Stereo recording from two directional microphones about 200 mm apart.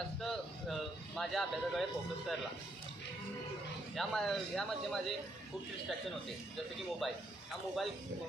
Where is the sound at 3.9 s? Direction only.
Centre (ahead or behind).